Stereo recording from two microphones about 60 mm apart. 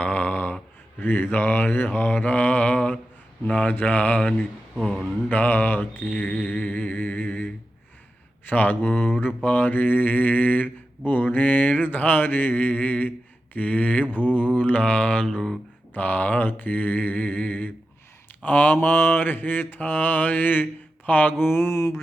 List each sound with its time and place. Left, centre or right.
0.0 s a sound: left
0.9 s mantra: left
4.8 s speech: centre
5.3 s mantra: left
6.1 s mantra: left
15.3 s speech: centre
16.0 s mantra: left
21.4 s mantra: left